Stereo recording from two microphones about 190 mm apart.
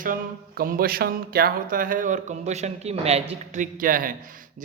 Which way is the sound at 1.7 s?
45° right (ahead or behind).